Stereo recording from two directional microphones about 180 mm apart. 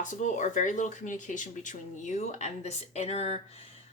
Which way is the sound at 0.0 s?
45° left (ahead or behind).